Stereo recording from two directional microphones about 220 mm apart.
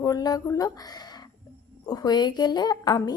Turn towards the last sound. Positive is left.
turn(degrees=20)  # may be behind; listen again after turning